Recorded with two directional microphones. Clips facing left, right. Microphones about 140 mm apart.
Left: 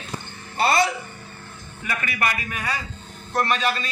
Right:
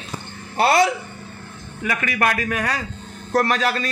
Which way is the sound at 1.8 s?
75° right (ahead or behind).